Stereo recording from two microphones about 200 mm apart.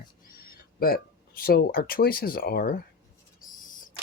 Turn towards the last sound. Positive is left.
turn(degrees=40)  # may be behind; listen again after turning